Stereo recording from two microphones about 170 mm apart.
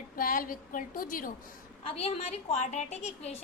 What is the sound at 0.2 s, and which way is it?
A woman's voice, 55° left (ahead or behind).